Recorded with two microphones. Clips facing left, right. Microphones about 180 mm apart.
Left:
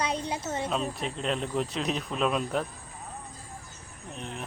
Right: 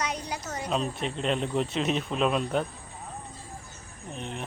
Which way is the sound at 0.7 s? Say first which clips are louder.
Right 2 dB; centre (ahead or behind).